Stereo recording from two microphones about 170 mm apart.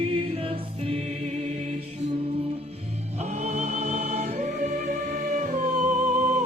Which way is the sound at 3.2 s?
40° right (ahead or behind).